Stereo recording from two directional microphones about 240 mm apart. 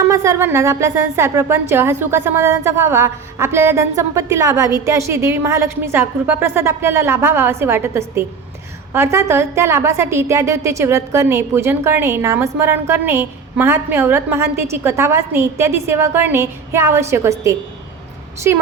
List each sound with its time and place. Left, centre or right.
0.1 s a woman's voice: centre